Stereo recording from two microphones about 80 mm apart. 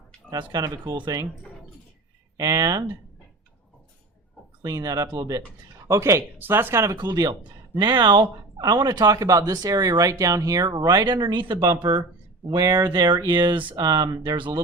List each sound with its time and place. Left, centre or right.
0.3 s speech: right
2.4 s speech: right
4.6 s speech: right
5.9 s speech: right
6.9 s speech: right
7.8 s speech: right
11.8 s speech: right
13.7 s speech: right
14.3 s speech: right